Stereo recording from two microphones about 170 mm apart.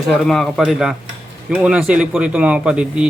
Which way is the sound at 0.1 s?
Centre (ahead or behind).